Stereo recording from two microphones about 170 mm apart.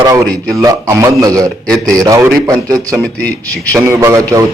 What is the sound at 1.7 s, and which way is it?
Speech, 5° left (ahead or behind).